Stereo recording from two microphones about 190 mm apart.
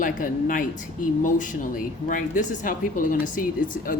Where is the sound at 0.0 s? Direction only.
45° left (ahead or behind).